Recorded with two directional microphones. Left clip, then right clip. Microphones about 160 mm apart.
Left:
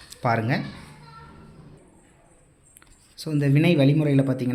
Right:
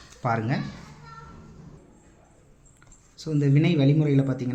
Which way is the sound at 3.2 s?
25° left (ahead or behind).